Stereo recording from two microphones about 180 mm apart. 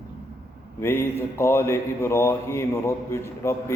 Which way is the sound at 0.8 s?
15° left (ahead or behind).